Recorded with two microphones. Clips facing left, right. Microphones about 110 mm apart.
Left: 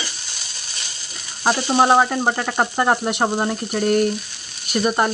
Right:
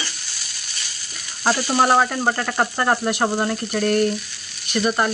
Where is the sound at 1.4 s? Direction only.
20° left (ahead or behind).